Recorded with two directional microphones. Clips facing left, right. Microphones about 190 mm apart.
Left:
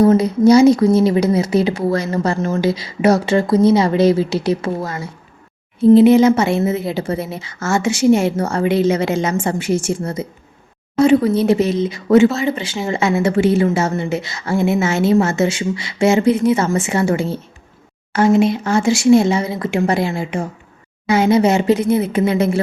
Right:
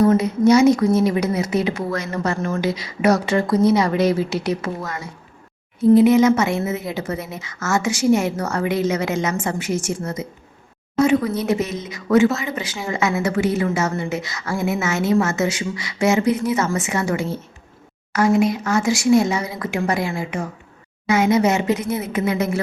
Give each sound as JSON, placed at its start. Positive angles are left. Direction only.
{"t": 0.0, "sound": "a woman's voice", "side_deg": 35}